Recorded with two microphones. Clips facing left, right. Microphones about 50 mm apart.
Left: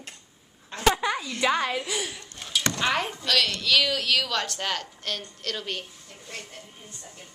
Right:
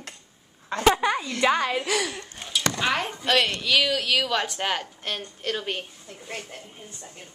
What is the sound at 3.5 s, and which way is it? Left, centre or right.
A woman's voice, centre.